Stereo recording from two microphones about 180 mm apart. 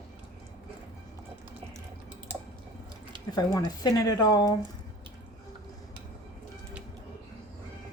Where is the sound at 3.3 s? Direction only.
20° left (ahead or behind).